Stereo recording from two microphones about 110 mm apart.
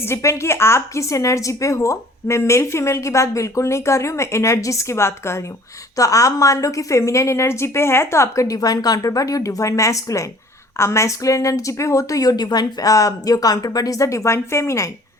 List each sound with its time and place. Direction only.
0.0 s a woman's voice: 25° left (ahead or behind)